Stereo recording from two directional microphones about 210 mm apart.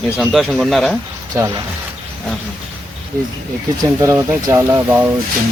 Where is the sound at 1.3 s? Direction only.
20° right (ahead or behind).